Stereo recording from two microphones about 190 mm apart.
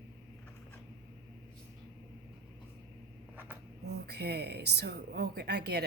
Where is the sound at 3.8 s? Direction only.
60° right (ahead or behind).